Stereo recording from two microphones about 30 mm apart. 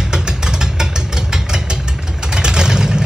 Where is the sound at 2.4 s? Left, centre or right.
Right.